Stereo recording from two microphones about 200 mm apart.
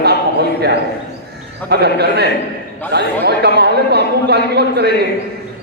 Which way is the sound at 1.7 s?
55° right (ahead or behind).